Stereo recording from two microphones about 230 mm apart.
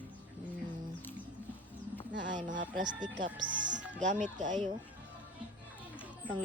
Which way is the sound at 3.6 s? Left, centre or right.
Right.